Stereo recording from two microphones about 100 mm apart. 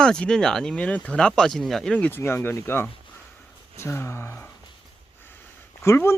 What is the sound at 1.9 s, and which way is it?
Speech, 20° left (ahead or behind).